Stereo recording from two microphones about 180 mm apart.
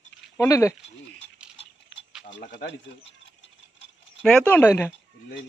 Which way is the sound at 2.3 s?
75° left (ahead or behind).